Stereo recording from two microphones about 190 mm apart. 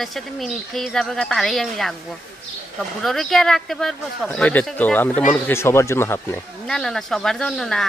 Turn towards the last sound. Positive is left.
turn(degrees=0)  # may be behind; listen again after turning